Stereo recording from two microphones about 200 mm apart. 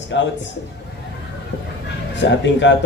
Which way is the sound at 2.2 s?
65° left (ahead or behind).